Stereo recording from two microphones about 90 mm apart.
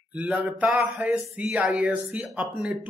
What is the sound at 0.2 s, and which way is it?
Speech, 15° right (ahead or behind).